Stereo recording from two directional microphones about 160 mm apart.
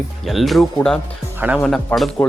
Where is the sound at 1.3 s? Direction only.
10° right (ahead or behind).